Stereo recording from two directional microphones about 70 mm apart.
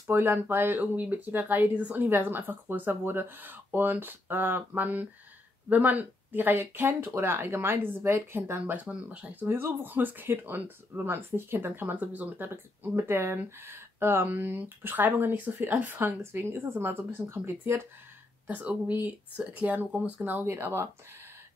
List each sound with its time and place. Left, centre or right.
0.1 s speech: right
8.8 s speech: centre
12.9 s speech: right
18.5 s speech: centre
20.4 s speech: right